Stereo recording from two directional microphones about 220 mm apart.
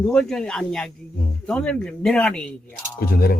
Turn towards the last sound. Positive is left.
turn(degrees=45)  # may be behind; listen again after turning